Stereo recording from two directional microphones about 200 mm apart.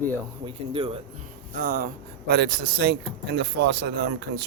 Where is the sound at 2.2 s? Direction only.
55° right (ahead or behind).